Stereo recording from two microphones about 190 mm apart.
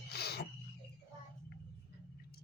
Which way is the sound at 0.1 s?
55° left (ahead or behind).